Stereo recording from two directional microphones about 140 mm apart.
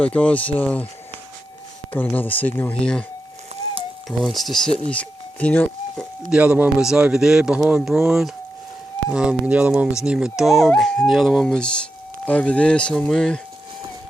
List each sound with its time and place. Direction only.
0.0 s speech: 10° left (ahead or behind)
1.9 s speech: 10° left (ahead or behind)
4.2 s speech: centre (ahead or behind)
6.3 s speech: 10° right (ahead or behind)